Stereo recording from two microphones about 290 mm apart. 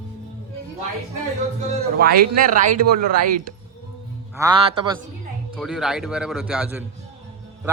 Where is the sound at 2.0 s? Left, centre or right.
Right.